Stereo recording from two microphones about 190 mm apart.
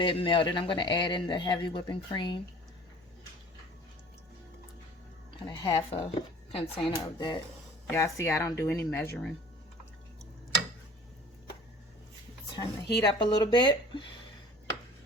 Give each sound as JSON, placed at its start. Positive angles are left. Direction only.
{"t": 0.0, "sound": "speech", "side_deg": 25}
{"t": 5.3, "sound": "speech", "side_deg": 25}
{"t": 13.0, "sound": "speech", "side_deg": 25}